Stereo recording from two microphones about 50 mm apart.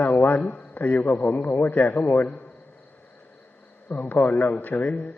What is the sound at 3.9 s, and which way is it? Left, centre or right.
A man's voice, left.